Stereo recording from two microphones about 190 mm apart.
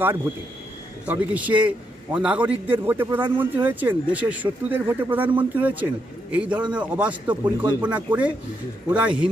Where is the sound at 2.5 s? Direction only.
30° right (ahead or behind).